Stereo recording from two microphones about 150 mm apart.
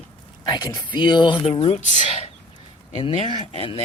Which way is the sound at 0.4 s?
30° left (ahead or behind).